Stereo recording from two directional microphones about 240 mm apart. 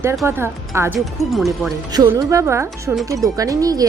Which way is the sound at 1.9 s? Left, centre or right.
Centre.